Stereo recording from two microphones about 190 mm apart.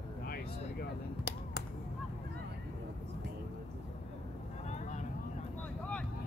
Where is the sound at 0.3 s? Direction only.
55° left (ahead or behind).